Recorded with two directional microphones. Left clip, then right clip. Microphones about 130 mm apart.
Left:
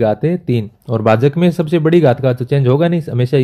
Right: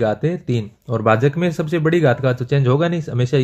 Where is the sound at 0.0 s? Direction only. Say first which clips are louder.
Left 4 dB; 35° left (ahead or behind).